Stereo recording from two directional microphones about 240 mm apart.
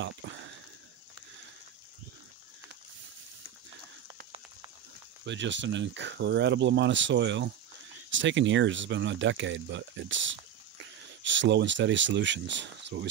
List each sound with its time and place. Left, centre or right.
5.2 s speech: right